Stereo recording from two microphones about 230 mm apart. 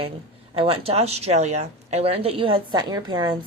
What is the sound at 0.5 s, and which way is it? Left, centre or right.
Speech, right.